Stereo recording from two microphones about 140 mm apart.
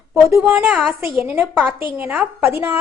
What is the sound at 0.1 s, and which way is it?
Speech, 15° right (ahead or behind).